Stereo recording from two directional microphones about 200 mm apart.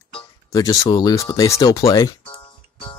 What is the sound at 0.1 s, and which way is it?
Speech, 20° left (ahead or behind).